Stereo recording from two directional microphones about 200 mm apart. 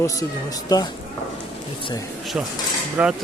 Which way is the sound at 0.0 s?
15° left (ahead or behind).